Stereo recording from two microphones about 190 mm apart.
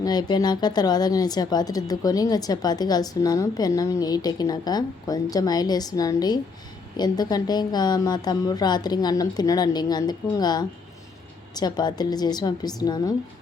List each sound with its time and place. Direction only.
0.0 s a woman's voice: 20° left (ahead or behind)